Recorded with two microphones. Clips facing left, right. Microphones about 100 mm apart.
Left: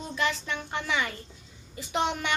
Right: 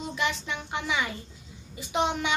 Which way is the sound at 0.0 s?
15° right (ahead or behind).